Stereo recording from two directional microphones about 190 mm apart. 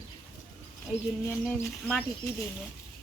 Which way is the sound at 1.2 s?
15° left (ahead or behind).